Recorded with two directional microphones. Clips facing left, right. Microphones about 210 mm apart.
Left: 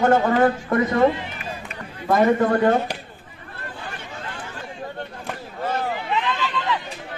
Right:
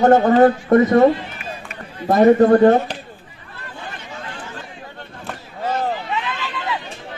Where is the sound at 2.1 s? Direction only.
35° right (ahead or behind).